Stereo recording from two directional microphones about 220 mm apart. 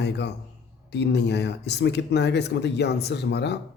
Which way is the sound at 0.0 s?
50° left (ahead or behind).